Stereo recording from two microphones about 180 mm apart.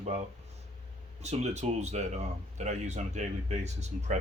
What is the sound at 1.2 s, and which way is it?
A man's voice, 40° right (ahead or behind).